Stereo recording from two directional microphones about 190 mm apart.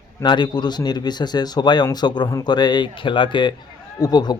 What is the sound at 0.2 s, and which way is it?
Speech, 25° left (ahead or behind).